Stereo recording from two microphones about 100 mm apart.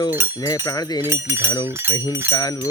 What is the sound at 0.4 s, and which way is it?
Speech, 40° left (ahead or behind).